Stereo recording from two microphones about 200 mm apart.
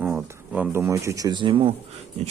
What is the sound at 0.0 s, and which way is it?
Speech, 10° right (ahead or behind).